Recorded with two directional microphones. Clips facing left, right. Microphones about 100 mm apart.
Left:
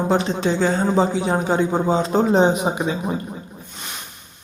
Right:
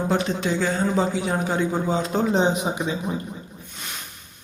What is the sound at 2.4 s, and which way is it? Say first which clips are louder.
Speech: left 4 dB; 50° left (ahead or behind).